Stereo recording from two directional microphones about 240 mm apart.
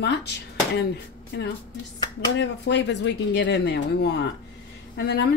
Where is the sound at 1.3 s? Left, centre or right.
Left.